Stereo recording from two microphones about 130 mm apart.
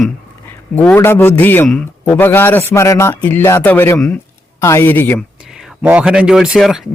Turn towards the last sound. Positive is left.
turn(degrees=-5)  # may be behind; listen again after turning